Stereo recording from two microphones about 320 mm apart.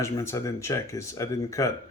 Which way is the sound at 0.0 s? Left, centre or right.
Centre.